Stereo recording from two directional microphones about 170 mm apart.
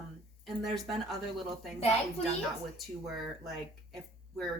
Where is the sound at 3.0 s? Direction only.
Centre (ahead or behind).